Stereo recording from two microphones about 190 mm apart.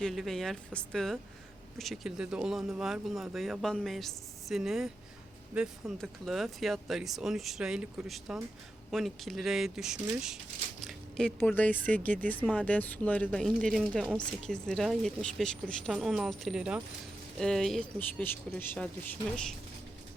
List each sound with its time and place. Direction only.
0.0 s speech: centre (ahead or behind)
10.8 s a sound: 5° right (ahead or behind)
11.3 s speech: 10° left (ahead or behind)